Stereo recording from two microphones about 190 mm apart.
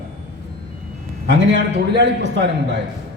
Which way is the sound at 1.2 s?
65° right (ahead or behind).